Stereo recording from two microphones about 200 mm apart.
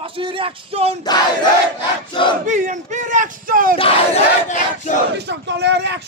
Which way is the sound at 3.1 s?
40° right (ahead or behind).